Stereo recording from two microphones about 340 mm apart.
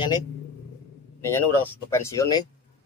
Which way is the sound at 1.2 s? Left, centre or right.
Centre.